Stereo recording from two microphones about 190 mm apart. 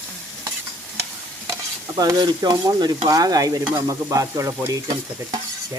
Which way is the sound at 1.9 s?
20° right (ahead or behind).